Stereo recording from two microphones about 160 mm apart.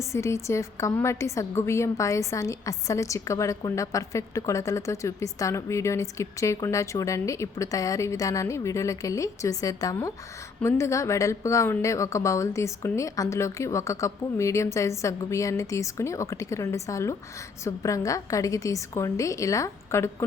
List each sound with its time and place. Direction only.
0.1 s a woman's voice: 20° left (ahead or behind)